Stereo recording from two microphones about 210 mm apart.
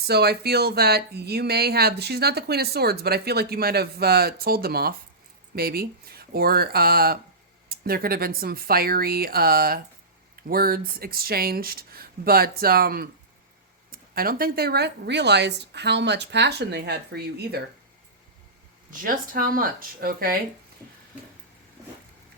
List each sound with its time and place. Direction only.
0.1 s speech: 50° right (ahead or behind)
18.9 s speech: 40° right (ahead or behind)